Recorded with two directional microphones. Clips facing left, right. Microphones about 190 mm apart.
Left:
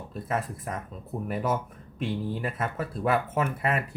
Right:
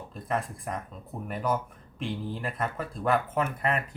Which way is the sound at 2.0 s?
5° left (ahead or behind).